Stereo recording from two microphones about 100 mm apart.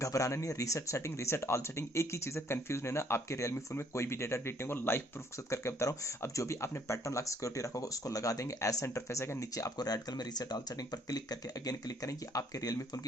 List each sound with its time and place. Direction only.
0.0 s speech: 30° left (ahead or behind)